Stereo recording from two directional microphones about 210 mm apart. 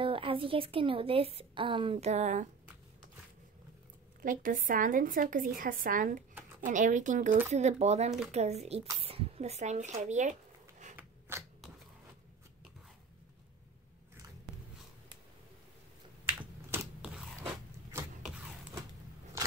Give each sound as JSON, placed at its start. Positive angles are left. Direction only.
{"t": 0.0, "sound": "a woman's voice", "side_deg": -25}
{"t": 4.2, "sound": "speech", "side_deg": -40}
{"t": 11.0, "sound": "zipper", "side_deg": -10}
{"t": 16.7, "sound": "a sound", "side_deg": -10}